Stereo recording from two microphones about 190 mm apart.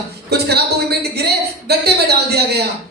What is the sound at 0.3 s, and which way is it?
A woman's voice, 60° right (ahead or behind).